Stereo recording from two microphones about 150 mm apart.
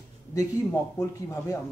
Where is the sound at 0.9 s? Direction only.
20° left (ahead or behind).